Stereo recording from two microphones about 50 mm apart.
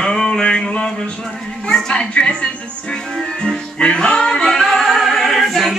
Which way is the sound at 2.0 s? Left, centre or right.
Left.